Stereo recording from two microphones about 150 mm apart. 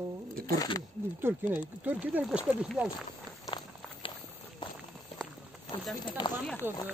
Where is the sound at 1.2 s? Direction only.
15° right (ahead or behind).